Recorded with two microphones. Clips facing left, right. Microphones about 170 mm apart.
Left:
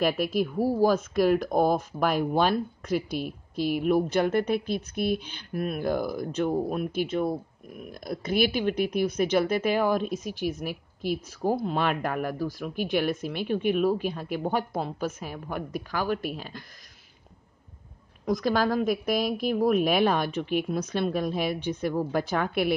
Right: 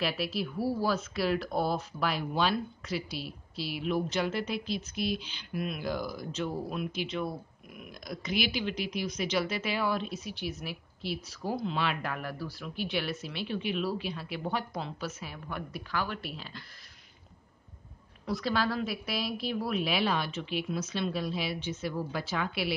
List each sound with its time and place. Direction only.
0.0 s speech: 50° left (ahead or behind)
7.9 s speech: 55° left (ahead or behind)
18.2 s speech: 45° left (ahead or behind)